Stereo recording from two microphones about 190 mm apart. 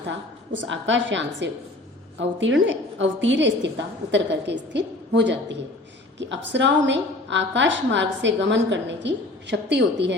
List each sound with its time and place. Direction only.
0.5 s a woman's voice: 80° right